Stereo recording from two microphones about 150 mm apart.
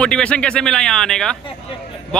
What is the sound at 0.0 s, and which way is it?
Speech, 5° left (ahead or behind).